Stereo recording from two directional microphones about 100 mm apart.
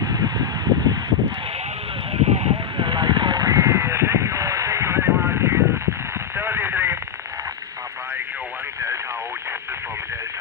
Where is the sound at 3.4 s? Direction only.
30° right (ahead or behind).